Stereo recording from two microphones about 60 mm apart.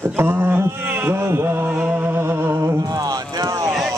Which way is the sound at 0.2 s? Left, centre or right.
Right.